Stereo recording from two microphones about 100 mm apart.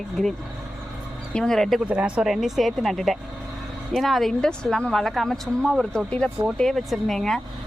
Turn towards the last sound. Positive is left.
turn(degrees=5)  # may be behind; listen again after turning